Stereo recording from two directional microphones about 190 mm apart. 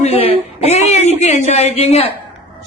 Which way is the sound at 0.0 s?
30° left (ahead or behind).